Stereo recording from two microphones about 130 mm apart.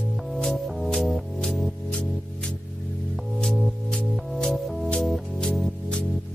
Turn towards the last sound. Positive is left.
turn(degrees=5)  # may be behind; listen again after turning